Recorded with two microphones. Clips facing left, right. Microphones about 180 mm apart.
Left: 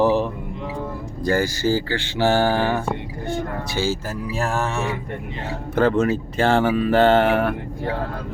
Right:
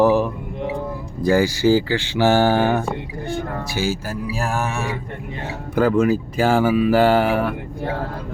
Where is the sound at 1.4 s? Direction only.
15° right (ahead or behind).